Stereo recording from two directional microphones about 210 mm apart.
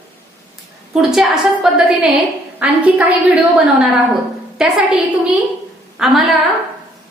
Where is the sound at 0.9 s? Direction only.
Centre (ahead or behind).